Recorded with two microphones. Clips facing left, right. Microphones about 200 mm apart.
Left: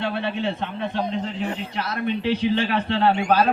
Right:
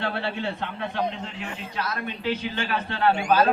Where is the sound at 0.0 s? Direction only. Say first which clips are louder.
Left 3 dB; 20° left (ahead or behind).